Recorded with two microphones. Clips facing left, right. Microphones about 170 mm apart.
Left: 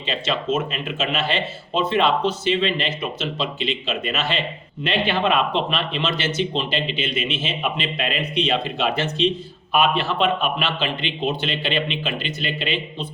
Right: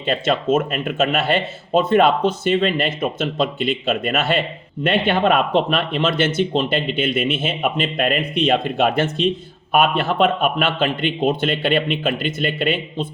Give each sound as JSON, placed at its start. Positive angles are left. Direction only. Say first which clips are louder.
{"t": 0.0, "sound": "speech", "louder": "right 5 dB", "side_deg": -50}